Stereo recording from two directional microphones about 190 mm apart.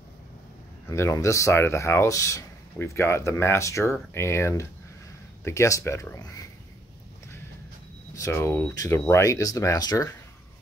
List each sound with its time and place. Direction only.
0.8 s speech: 15° left (ahead or behind)
8.1 s speech: 15° left (ahead or behind)